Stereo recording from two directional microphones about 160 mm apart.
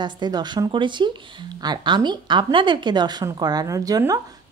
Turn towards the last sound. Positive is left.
turn(degrees=-20)  # may be behind; listen again after turning